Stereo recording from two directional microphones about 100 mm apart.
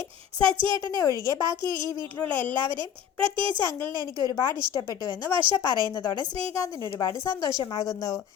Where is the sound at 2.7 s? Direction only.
55° right (ahead or behind).